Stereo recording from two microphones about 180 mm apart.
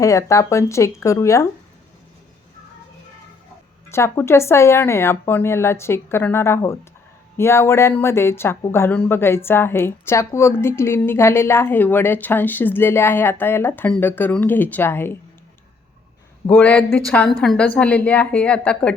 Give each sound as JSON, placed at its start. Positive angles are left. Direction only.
{"t": 0.0, "sound": "speech", "side_deg": 15}
{"t": 3.9, "sound": "speech", "side_deg": 15}
{"t": 16.5, "sound": "speech", "side_deg": 10}